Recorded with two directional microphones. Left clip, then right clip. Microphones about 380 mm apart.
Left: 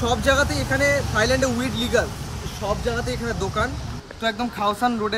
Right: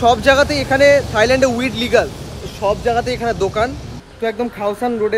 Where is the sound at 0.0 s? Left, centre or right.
Centre.